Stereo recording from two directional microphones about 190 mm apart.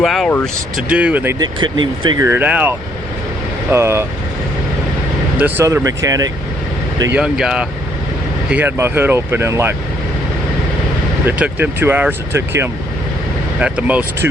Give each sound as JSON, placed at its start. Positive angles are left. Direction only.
{"t": 0.0, "sound": "speech", "side_deg": 0}
{"t": 0.8, "sound": "speech", "side_deg": -5}
{"t": 1.4, "sound": "speech", "side_deg": -25}
{"t": 5.4, "sound": "speech", "side_deg": -10}
{"t": 7.2, "sound": "speech", "side_deg": -5}
{"t": 11.3, "sound": "speech", "side_deg": -10}